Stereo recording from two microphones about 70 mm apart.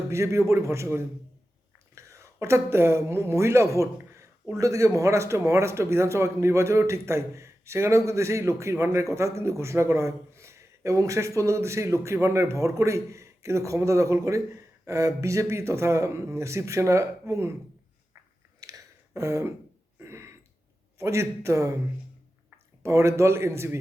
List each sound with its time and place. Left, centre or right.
0.1 s speech: right
18.6 s a sound: right
21.0 s speech: right